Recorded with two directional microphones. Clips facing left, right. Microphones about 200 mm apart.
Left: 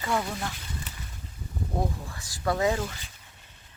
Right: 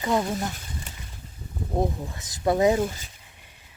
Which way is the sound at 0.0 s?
20° right (ahead or behind).